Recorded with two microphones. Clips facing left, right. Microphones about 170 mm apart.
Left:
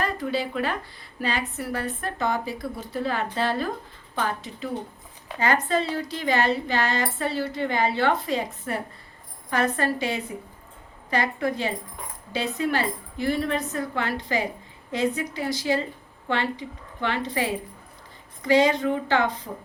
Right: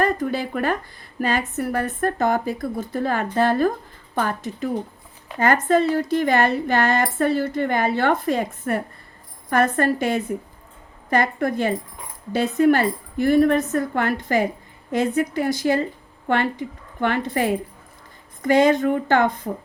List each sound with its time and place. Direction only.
0.0 s a woman's voice: 50° right (ahead or behind)